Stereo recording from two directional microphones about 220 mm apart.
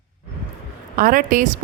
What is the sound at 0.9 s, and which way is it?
Speech, 40° right (ahead or behind).